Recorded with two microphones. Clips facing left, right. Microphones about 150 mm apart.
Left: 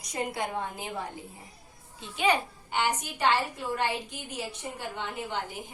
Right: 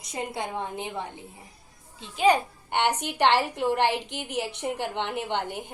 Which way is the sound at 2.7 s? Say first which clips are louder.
Right 4 dB; 65° right (ahead or behind).